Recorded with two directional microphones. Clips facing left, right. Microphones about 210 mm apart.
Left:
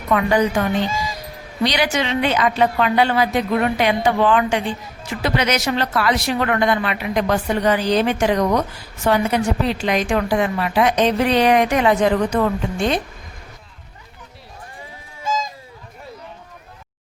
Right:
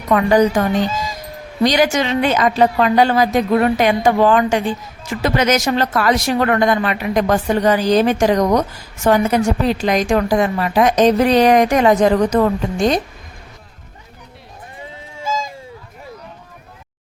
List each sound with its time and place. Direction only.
0.1 s a woman's voice: 40° right (ahead or behind)